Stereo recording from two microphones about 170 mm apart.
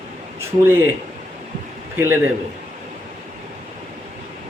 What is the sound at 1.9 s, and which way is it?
Speech, 10° right (ahead or behind).